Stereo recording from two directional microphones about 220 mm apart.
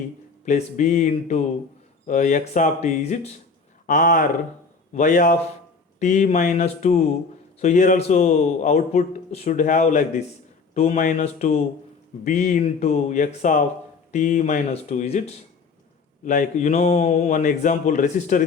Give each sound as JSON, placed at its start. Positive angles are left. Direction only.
{"t": 0.4, "sound": "speech", "side_deg": 35}
{"t": 16.2, "sound": "speech", "side_deg": 35}